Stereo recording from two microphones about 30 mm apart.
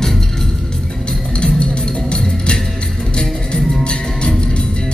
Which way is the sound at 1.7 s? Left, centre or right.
Left.